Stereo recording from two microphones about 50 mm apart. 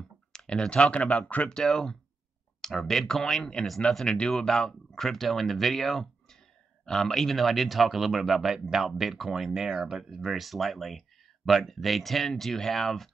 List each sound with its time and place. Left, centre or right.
0.3 s computer keyboard: centre
0.9 s speech: left
1.5 s speech: centre